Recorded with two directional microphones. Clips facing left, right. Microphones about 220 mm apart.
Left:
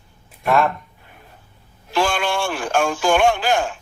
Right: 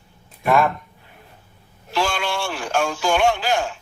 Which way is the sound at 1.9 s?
50° left (ahead or behind).